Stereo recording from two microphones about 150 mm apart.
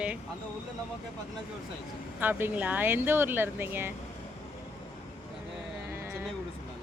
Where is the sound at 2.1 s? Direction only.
10° right (ahead or behind).